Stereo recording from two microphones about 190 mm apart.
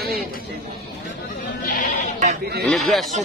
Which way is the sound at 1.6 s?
50° left (ahead or behind).